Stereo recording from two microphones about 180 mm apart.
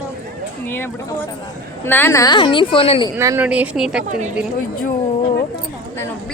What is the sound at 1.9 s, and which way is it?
A woman's voice, 15° left (ahead or behind).